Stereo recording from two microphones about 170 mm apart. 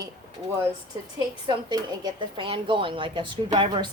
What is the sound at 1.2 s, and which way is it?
Speech, 25° right (ahead or behind).